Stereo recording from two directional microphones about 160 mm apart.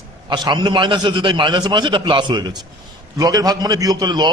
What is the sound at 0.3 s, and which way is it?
A man's voice, 30° right (ahead or behind).